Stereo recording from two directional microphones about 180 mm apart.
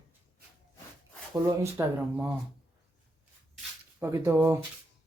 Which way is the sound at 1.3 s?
20° right (ahead or behind).